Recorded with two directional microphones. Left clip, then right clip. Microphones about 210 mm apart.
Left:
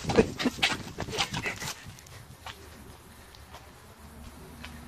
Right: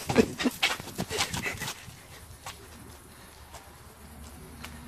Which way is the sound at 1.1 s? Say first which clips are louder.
Even; 25° right (ahead or behind).